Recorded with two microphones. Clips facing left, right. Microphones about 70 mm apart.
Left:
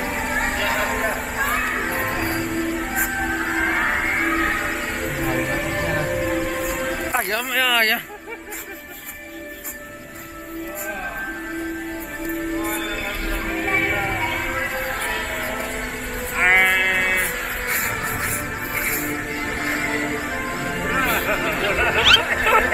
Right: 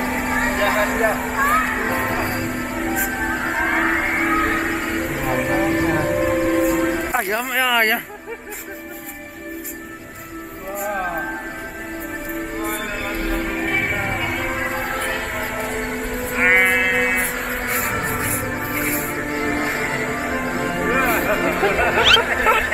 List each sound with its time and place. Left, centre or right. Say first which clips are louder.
0.0 s vehicle: right 3 dB; centre
1.4 s music: right 5 dB; right
2.0 s music: right 2 dB; centre
3.8 s a sound: right 2 dB; centre
7.0 s speech: right 2 dB; centre
13.3 s a sound: right 2 dB; centre
13.7 s music: even; centre
16.0 s a sound: even; centre
17.6 s music: right 2 dB; centre
20.5 s music: right 3 dB; right
21.0 s music: right 1 dB; centre
21.3 s a sound: right 3 dB; right
21.8 s speech: even; centre